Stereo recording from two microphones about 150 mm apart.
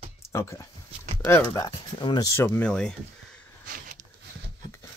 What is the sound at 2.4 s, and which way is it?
Speech, 10° left (ahead or behind).